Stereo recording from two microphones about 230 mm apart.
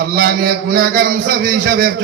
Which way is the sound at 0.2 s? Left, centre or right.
Right.